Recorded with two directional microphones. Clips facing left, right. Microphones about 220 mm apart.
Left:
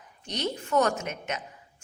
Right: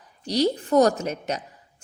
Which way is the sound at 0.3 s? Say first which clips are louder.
Right 9 dB; 35° right (ahead or behind).